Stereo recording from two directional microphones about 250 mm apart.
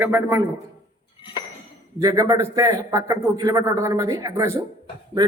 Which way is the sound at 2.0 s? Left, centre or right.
Centre.